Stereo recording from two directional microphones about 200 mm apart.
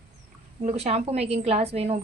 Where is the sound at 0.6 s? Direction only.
30° right (ahead or behind).